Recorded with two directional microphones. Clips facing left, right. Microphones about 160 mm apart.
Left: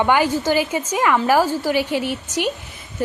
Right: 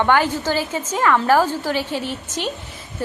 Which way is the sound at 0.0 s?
10° left (ahead or behind).